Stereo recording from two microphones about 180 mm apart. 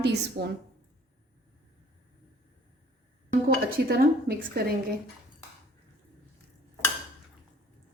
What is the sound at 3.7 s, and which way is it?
Speech, 55° right (ahead or behind).